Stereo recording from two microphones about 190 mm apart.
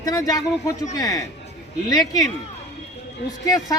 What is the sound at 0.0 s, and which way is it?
Speech, 20° left (ahead or behind).